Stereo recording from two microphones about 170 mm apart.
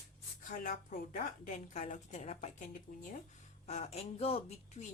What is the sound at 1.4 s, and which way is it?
Speech, 45° left (ahead or behind).